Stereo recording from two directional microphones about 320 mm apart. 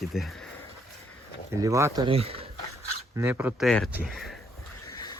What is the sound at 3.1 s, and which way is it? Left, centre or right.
Speech, centre.